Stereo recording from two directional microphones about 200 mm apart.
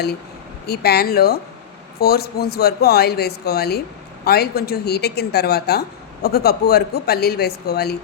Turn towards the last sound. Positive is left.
turn(degrees=55)  # may be behind; listen again after turning